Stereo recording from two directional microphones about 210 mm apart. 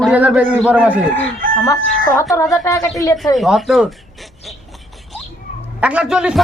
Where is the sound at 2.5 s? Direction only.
15° left (ahead or behind).